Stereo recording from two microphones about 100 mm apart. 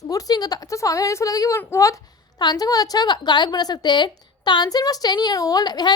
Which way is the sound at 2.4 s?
40° left (ahead or behind).